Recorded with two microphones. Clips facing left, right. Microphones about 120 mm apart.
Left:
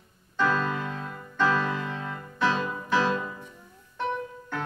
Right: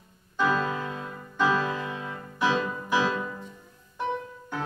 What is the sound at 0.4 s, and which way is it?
Music, 10° right (ahead or behind).